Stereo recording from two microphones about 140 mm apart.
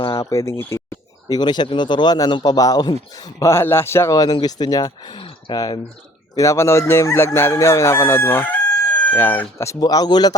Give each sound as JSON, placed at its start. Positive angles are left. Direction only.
{"t": 0.1, "sound": "speech", "side_deg": 20}
{"t": 1.3, "sound": "speech", "side_deg": 30}